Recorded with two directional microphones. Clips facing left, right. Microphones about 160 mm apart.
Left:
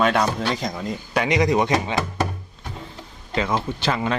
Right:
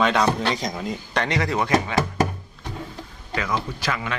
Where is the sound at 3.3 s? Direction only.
25° left (ahead or behind).